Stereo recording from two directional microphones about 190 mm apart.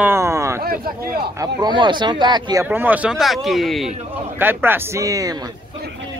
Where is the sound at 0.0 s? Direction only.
15° right (ahead or behind).